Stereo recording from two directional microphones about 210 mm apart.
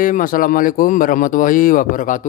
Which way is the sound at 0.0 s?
40° left (ahead or behind).